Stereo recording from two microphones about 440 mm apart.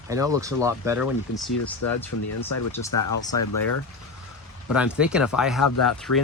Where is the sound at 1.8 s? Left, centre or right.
Left.